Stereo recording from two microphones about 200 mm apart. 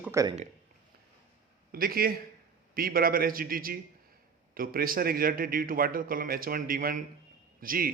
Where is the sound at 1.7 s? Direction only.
45° right (ahead or behind).